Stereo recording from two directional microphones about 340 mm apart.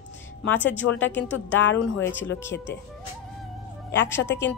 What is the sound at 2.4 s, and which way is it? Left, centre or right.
Speech, centre.